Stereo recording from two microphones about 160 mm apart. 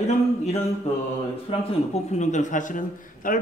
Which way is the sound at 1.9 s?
45° left (ahead or behind).